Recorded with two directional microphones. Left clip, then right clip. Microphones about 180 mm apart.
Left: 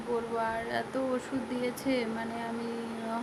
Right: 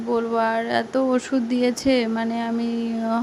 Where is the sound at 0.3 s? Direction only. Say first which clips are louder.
Right 11 dB; 50° right (ahead or behind).